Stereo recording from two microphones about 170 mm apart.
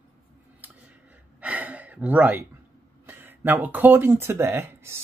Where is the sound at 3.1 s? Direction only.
10° right (ahead or behind).